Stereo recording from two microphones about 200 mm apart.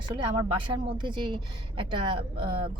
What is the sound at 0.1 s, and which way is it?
Speech, 25° right (ahead or behind).